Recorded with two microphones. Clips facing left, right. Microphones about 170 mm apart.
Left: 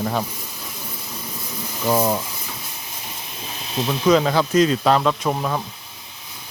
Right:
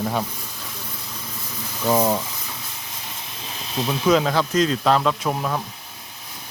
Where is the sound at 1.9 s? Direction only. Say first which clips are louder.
Even; 5° right (ahead or behind).